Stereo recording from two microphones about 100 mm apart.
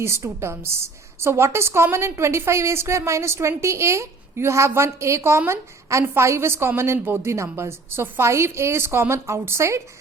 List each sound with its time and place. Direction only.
0.0 s a woman's voice: 25° right (ahead or behind)